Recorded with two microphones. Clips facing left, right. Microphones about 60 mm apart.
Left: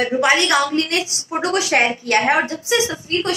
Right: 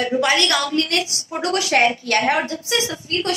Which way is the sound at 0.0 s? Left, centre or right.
Left.